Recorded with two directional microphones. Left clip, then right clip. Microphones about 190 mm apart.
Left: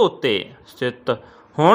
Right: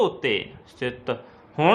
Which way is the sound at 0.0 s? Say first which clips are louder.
Left 5 dB; 20° left (ahead or behind).